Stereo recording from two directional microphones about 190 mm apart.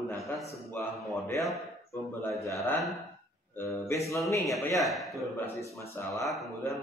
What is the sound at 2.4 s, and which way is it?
A man's voice, 15° left (ahead or behind).